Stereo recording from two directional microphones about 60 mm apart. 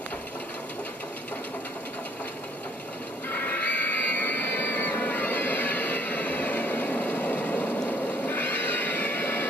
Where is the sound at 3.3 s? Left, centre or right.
Left.